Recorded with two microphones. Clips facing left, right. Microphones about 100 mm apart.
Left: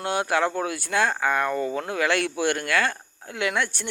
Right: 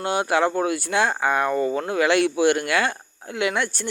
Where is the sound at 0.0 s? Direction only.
5° right (ahead or behind).